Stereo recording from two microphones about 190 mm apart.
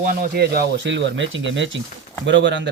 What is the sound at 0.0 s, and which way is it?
Speech, 50° right (ahead or behind).